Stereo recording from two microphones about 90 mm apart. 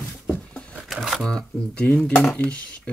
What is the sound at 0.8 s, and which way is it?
Speech, centre (ahead or behind).